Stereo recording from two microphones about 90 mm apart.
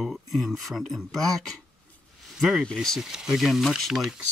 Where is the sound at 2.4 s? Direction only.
Centre (ahead or behind).